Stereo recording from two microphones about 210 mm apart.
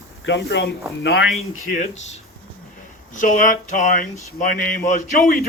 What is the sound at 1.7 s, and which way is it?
Speech, 35° left (ahead or behind).